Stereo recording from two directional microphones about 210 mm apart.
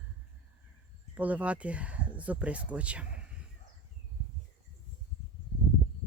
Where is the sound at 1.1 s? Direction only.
5° right (ahead or behind).